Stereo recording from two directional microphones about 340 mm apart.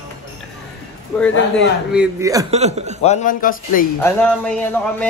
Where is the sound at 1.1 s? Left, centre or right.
Centre.